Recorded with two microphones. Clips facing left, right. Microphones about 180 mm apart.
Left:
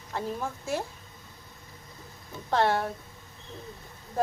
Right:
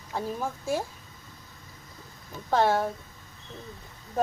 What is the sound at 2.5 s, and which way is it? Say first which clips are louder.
Speech: right 2 dB; 5° right (ahead or behind).